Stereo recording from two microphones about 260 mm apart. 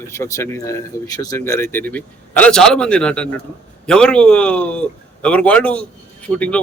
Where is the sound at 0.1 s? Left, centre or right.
Centre.